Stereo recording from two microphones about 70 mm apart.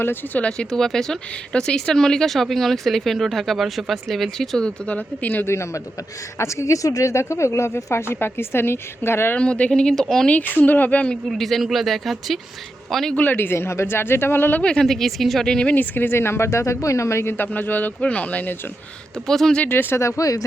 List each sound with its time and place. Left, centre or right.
0.0 s speech: left
0.4 s speech: centre
5.5 s speech: left
9.3 s speech: centre
10.2 s speech: left
11.3 s speech: centre
13.1 s speech: left
14.6 s speech: centre
15.7 s speech: left
17.3 s speech: left
19.3 s speech: centre
19.6 s speech: left